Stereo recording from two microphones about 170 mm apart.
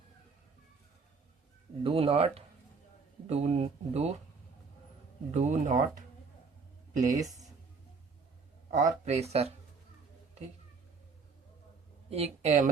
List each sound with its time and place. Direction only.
1.8 s speech: 35° right (ahead or behind)
5.3 s speech: 45° right (ahead or behind)
7.0 s speech: 20° right (ahead or behind)
8.7 s speech: 45° right (ahead or behind)
12.1 s speech: 40° right (ahead or behind)